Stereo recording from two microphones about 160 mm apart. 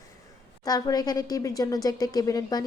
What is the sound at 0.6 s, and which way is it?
A woman's voice, 25° left (ahead or behind).